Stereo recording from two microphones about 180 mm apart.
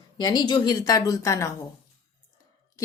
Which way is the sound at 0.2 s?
25° left (ahead or behind).